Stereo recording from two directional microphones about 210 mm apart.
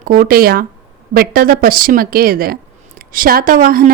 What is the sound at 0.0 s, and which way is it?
Speech, 45° right (ahead or behind).